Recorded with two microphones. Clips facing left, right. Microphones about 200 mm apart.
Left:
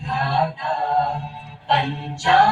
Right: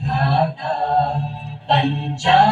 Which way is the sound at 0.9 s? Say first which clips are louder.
Right 3 dB; 30° right (ahead or behind).